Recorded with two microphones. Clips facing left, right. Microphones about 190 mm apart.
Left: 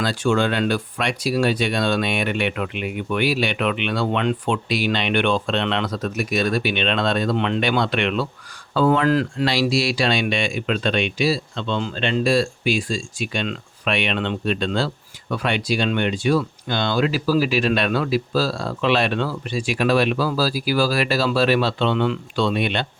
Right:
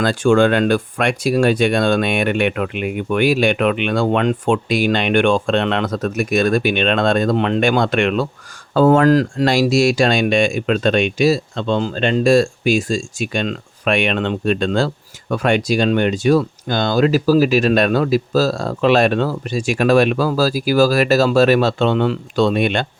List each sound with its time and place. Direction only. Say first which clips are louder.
0.0 s speech: right 6 dB; 50° right (ahead or behind)